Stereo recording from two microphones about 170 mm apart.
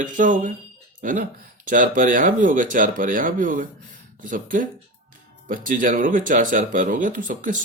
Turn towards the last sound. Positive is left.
turn(degrees=-50)  # may be behind; listen again after turning